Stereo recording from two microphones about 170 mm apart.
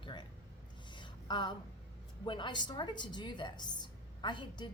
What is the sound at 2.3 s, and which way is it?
A woman's voice, 25° left (ahead or behind).